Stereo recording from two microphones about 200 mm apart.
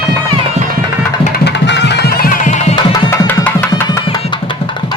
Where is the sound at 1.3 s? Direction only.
60° left (ahead or behind); by 2.8 s 35° left (ahead or behind).